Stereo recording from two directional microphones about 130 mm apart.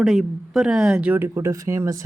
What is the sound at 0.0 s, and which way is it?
Speech, 5° right (ahead or behind).